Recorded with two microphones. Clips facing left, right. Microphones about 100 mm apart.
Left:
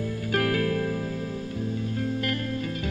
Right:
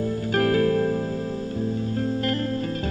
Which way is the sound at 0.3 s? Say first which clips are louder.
Right 5 dB; 30° right (ahead or behind).